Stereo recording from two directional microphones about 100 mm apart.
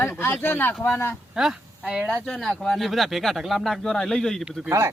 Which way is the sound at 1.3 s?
5° right (ahead or behind).